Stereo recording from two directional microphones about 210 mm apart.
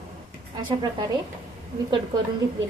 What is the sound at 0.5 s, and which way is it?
Speech, 20° right (ahead or behind).